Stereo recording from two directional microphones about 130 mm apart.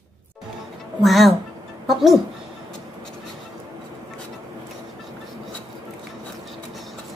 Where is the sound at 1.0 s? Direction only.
Centre (ahead or behind).